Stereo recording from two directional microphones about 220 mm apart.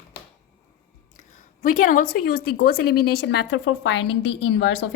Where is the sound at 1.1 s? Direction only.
35° left (ahead or behind).